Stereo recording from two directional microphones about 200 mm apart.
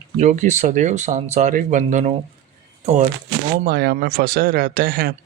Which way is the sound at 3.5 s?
50° right (ahead or behind).